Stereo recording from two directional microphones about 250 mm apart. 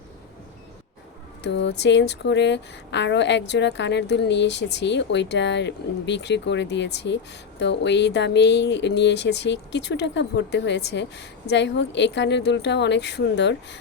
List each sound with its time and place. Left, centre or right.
1.5 s speech: left